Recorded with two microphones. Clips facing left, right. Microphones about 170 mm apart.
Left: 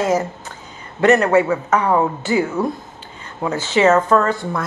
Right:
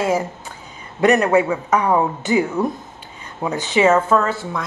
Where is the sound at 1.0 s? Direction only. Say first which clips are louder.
Left 1 dB; 15° right (ahead or behind).